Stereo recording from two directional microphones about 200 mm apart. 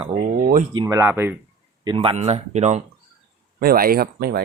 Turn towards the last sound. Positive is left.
turn(degrees=-50)  # may be behind; listen again after turning